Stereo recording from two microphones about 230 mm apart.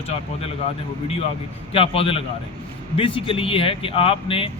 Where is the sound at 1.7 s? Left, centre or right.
Left.